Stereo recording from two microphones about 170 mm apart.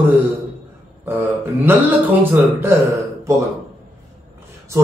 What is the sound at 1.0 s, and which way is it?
Speech, 10° right (ahead or behind).